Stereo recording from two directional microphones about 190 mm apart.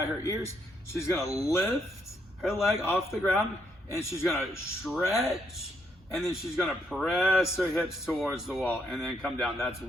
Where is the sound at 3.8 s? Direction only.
15° left (ahead or behind).